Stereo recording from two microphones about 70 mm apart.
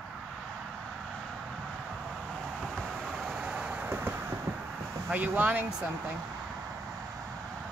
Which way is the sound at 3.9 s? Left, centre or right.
Right.